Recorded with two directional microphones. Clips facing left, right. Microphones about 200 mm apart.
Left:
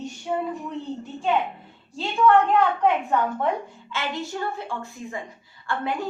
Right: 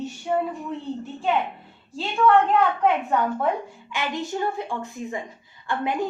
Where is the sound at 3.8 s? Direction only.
15° right (ahead or behind).